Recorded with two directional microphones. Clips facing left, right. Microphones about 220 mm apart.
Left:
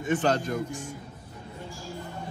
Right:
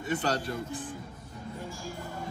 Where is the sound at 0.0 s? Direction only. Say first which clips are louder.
Left 5 dB; 40° right (ahead or behind).